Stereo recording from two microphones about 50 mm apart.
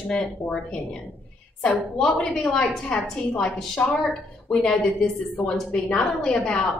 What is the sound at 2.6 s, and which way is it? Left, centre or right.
Speech, left.